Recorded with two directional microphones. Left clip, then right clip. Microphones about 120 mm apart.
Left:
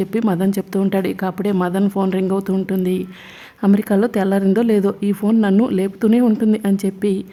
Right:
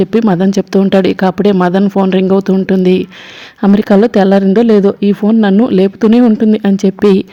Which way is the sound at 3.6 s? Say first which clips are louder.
Right 8 dB; 30° right (ahead or behind).